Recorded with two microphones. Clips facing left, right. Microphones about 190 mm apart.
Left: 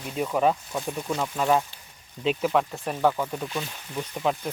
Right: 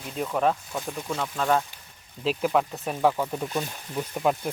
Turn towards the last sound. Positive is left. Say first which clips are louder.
# right 2 dB
turn(degrees=-5)  # may be behind; listen again after turning